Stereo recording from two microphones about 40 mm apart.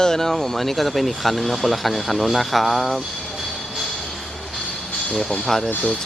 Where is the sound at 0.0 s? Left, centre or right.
Centre.